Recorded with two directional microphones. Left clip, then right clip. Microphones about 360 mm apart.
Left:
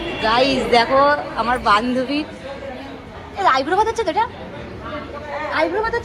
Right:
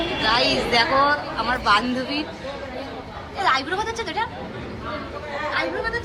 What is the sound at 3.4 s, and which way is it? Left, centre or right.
Speech, centre.